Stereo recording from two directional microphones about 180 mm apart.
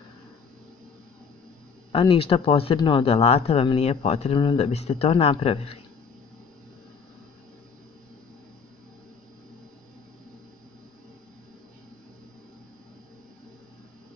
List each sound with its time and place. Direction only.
1.9 s speech: 30° left (ahead or behind)